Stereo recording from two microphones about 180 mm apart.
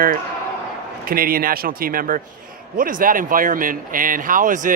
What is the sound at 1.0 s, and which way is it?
Speech, 55° right (ahead or behind).